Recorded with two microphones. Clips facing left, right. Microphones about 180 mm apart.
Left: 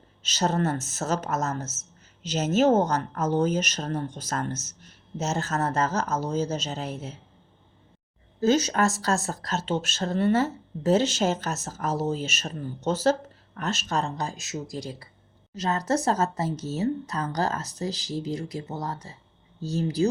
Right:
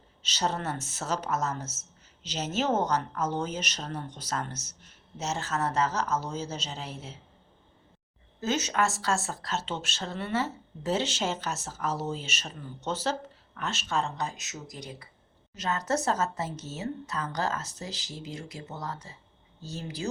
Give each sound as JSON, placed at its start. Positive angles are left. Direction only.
{"t": 0.2, "sound": "speech", "side_deg": 45}
{"t": 8.4, "sound": "speech", "side_deg": 35}